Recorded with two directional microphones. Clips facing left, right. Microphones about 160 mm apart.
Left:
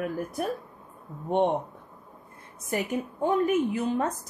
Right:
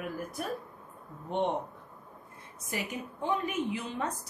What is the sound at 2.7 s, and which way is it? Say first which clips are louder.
A woman's voice: left 8 dB; 50° left (ahead or behind).